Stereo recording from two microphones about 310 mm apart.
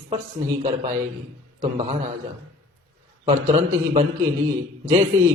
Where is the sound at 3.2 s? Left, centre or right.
Centre.